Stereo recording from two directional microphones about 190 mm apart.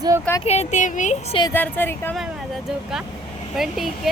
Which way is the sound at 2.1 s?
Centre (ahead or behind).